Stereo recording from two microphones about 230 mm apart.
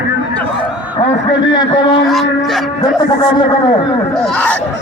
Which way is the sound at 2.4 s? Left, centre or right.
Centre.